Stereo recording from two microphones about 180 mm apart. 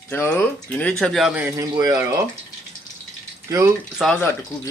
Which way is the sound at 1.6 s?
20° right (ahead or behind).